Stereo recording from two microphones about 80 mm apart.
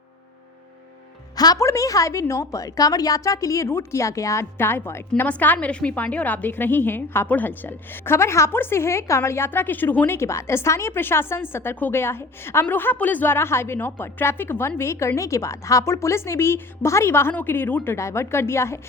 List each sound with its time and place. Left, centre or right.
1.5 s a woman's voice: left
4.5 s a woman's voice: left
5.3 s a woman's voice: centre
10.2 s a woman's voice: left
17.9 s a woman's voice: left